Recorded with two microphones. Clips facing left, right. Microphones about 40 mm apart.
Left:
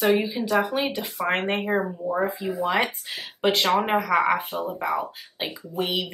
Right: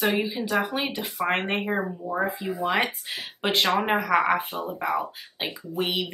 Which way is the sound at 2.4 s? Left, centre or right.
Centre.